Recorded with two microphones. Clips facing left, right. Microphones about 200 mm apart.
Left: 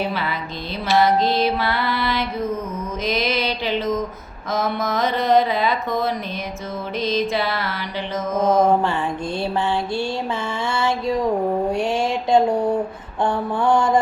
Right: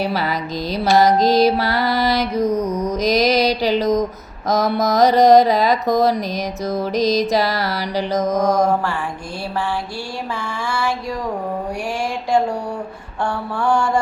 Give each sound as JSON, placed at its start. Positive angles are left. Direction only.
{"t": 0.0, "sound": "mantra", "side_deg": -40}
{"t": 0.9, "sound": "music", "side_deg": -40}
{"t": 4.4, "sound": "mantra", "side_deg": -40}
{"t": 12.3, "sound": "a sound", "side_deg": 20}
{"t": 13.2, "sound": "mantra", "side_deg": 20}